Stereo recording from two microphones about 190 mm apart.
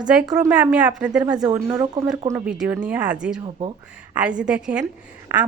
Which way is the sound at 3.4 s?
30° right (ahead or behind).